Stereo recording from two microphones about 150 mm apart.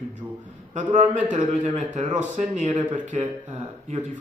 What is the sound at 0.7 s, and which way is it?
A man's voice, 55° right (ahead or behind).